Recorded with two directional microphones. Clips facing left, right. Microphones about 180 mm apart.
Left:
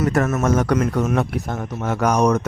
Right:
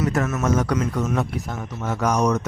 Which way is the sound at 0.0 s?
50° left (ahead or behind).